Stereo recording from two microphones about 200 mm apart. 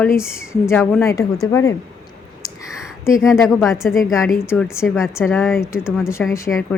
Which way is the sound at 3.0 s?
15° left (ahead or behind).